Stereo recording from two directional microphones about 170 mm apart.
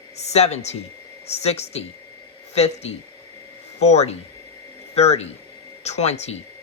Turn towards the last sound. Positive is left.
turn(degrees=40)  # may be behind; listen again after turning